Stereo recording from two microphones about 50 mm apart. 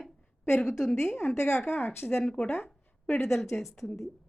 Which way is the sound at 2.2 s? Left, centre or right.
Centre.